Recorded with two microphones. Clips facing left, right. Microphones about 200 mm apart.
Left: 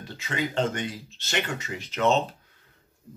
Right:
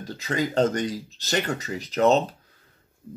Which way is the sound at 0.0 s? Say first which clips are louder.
Right 4 dB; 40° right (ahead or behind).